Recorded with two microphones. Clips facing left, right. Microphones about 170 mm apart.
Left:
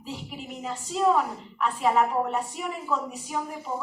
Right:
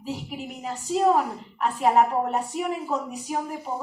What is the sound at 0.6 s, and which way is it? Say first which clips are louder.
A woman's voice: right 2 dB; 40° right (ahead or behind).